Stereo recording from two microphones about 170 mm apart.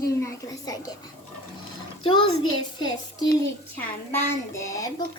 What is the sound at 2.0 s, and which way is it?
Speech, 30° left (ahead or behind).